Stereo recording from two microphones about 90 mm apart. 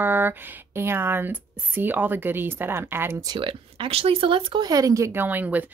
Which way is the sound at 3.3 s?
75° right (ahead or behind).